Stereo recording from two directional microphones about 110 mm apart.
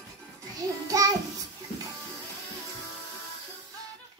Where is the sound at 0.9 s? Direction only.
30° right (ahead or behind).